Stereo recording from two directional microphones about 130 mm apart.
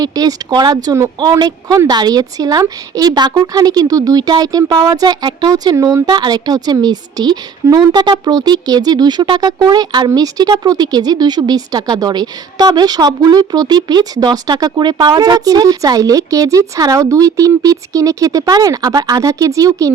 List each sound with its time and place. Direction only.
0.0 s a woman's voice: 30° right (ahead or behind)